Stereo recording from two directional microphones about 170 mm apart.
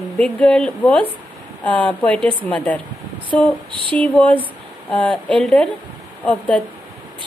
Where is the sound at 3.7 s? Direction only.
30° right (ahead or behind).